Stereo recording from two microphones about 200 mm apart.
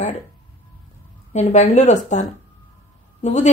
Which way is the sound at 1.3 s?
35° left (ahead or behind).